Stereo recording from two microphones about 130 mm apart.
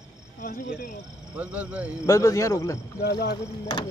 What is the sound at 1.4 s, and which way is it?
Speech, 10° right (ahead or behind).